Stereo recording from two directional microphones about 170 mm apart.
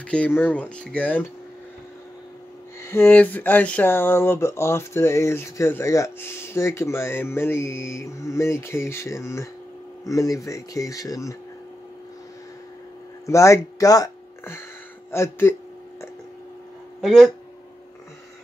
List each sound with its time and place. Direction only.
0.1 s speech: 10° left (ahead or behind)
2.8 s speech: 15° left (ahead or behind)
13.3 s speech: 15° left (ahead or behind)
17.0 s speech: centre (ahead or behind)